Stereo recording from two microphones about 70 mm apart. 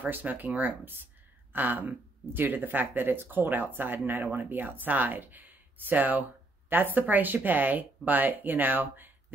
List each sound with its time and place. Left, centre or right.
0.0 s speech: right